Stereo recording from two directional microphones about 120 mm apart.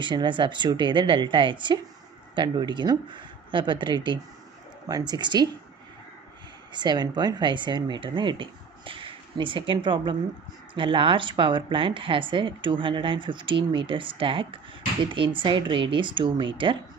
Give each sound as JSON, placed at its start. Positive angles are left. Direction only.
{"t": 0.0, "sound": "speech", "side_deg": -40}
{"t": 6.7, "sound": "a woman's voice", "side_deg": -40}